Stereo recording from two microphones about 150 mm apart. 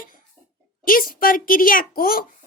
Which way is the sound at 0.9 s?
70° left (ahead or behind).